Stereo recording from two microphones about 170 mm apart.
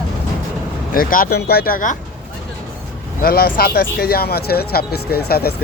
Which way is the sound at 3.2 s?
60° left (ahead or behind).